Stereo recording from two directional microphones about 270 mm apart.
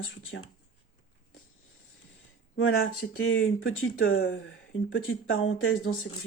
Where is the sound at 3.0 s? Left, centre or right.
Left.